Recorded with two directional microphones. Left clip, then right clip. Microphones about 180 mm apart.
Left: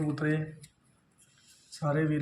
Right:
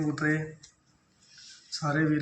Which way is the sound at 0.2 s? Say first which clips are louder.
Right 4 dB; 40° left (ahead or behind).